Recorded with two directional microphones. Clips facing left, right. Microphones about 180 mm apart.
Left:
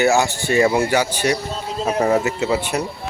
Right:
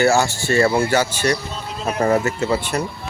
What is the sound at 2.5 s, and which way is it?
Speech, 15° left (ahead or behind).